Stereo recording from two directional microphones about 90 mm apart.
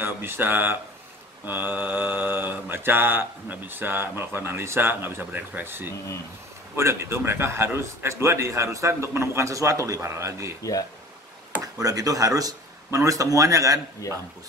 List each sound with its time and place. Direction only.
0.0 s mantra: 25° right (ahead or behind)
6.8 s a man's voice: 30° right (ahead or behind)
10.6 s speech: 40° left (ahead or behind)
11.6 s a man's voice: 40° right (ahead or behind)